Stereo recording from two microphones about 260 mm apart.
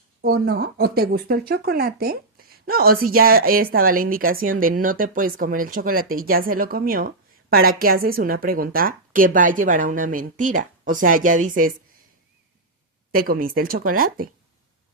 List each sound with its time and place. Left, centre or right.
0.2 s speech: right
13.1 s speech: right